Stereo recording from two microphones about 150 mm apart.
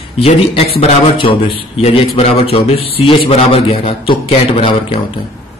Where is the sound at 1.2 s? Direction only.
40° left (ahead or behind).